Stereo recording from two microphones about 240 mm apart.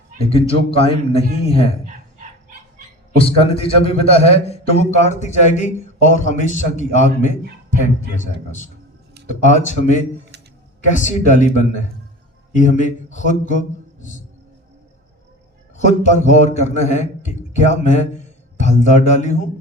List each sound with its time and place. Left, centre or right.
0.2 s a man's voice: left
2.5 s a sound: right
3.2 s a man's voice: left
8.4 s a man's voice: left
15.8 s a man's voice: left